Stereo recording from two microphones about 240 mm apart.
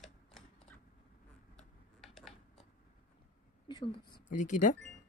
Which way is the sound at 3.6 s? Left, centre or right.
Centre.